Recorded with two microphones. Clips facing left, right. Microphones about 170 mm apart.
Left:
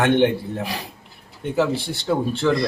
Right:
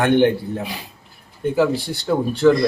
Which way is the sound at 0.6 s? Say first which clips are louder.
Left 1 dB; 90° left.